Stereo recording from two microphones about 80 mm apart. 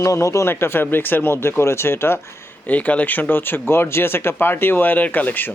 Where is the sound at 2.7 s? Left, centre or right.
Centre.